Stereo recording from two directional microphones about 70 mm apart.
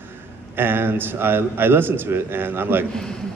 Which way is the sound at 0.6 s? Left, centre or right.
Right.